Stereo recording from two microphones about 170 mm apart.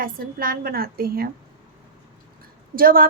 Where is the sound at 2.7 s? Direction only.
60° right (ahead or behind).